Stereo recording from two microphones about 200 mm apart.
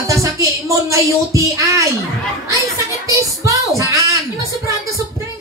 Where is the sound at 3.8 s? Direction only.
15° right (ahead or behind).